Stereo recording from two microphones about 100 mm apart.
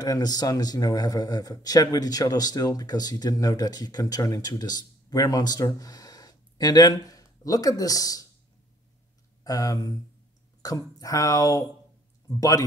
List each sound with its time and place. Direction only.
0.0 s speech: 40° left (ahead or behind)
9.4 s speech: 35° left (ahead or behind)